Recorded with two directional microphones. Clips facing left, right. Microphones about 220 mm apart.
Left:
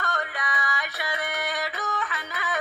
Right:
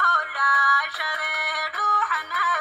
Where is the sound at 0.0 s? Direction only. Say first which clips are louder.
Right 1 dB; 20° left (ahead or behind).